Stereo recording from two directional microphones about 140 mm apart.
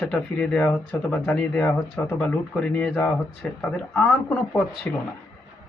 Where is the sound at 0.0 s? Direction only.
10° left (ahead or behind).